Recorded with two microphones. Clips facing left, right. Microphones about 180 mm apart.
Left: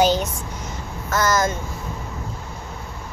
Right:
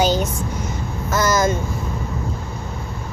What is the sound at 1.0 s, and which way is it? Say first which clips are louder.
Speech: right 2 dB; 10° right (ahead or behind).